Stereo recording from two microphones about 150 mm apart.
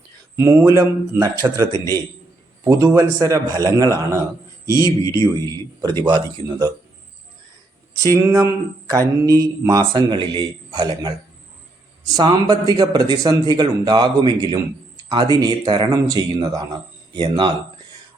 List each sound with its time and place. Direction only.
0.3 s speech: 20° right (ahead or behind)
1.7 s speech: 20° left (ahead or behind)
2.6 s speech: 20° right (ahead or behind)
4.7 s speech: 25° left (ahead or behind)
6.0 s speech: 25° right (ahead or behind)
8.1 s speech: 20° right (ahead or behind)